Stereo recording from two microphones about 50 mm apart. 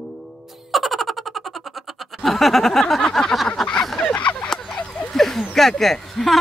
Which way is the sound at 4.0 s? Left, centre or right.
Left.